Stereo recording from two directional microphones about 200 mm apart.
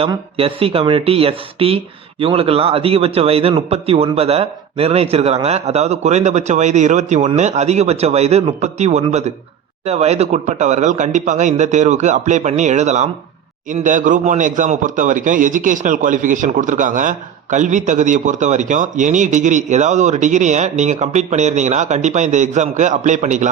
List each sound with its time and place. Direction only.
0.3 s a man's voice: 30° right (ahead or behind)